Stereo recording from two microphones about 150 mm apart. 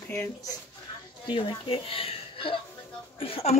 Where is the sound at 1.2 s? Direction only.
35° left (ahead or behind).